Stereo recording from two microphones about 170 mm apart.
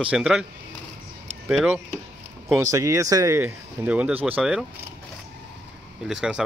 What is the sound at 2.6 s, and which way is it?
Speech, 20° right (ahead or behind).